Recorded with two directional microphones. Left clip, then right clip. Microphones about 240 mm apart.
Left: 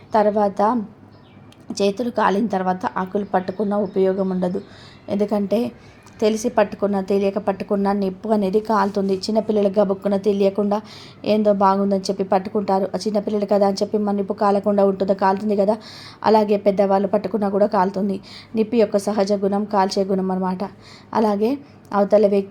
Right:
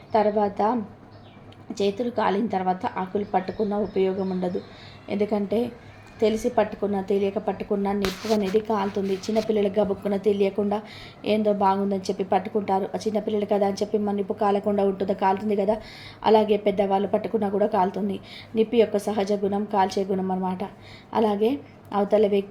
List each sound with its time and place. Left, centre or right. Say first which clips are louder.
0.1 s a woman's voice: left 4 dB; left